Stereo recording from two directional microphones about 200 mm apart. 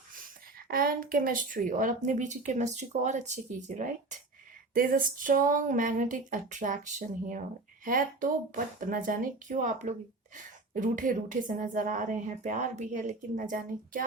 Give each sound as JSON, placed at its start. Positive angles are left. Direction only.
{"t": 0.7, "sound": "a woman's voice", "side_deg": -45}